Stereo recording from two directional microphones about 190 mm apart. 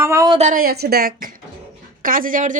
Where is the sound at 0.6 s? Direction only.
55° right (ahead or behind).